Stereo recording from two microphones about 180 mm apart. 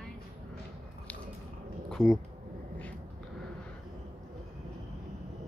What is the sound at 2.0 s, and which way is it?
Speech, 5° left (ahead or behind).